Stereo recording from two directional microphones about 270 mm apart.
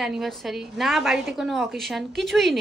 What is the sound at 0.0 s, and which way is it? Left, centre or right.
A woman's voice, centre.